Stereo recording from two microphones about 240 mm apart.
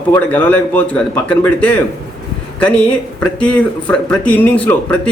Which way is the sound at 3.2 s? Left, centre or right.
Centre.